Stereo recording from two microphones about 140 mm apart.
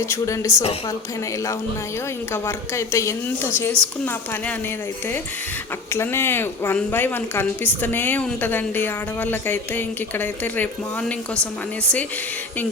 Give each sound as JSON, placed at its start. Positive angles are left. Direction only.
{"t": 0.0, "sound": "a woman's voice", "side_deg": 20}
{"t": 2.3, "sound": "speech", "side_deg": 20}
{"t": 5.9, "sound": "speech", "side_deg": 15}